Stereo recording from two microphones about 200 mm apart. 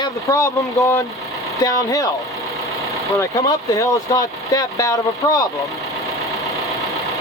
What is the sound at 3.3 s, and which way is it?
Speech, 15° left (ahead or behind).